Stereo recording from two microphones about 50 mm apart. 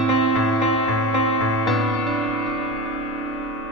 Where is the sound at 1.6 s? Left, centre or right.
Centre.